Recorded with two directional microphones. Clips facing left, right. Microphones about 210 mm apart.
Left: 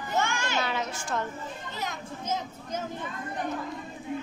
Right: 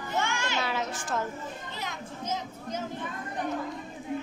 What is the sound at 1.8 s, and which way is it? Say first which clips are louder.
Speech: left 4 dB; 45° left (ahead or behind).